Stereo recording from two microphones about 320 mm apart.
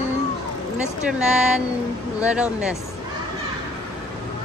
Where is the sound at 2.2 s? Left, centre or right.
Centre.